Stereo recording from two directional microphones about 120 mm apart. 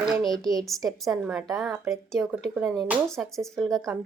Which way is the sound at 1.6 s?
25° right (ahead or behind).